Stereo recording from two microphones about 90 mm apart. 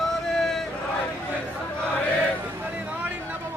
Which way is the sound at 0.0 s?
5° left (ahead or behind).